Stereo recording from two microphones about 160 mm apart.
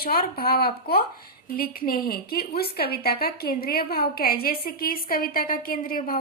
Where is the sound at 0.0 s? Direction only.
70° left (ahead or behind).